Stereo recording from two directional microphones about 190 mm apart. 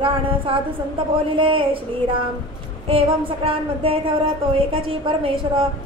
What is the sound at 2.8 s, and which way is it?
Speech, 30° right (ahead or behind).